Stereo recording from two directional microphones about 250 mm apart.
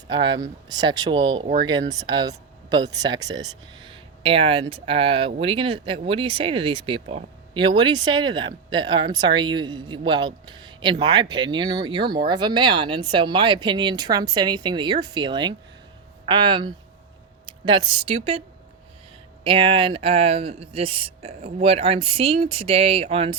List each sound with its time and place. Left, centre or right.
0.1 s speech: centre
19.5 s speech: right